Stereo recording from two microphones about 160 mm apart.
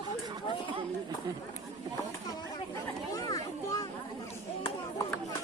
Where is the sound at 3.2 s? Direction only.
20° left (ahead or behind).